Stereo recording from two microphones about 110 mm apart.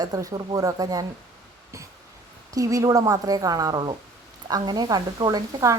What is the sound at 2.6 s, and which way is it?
A woman's voice, 30° right (ahead or behind).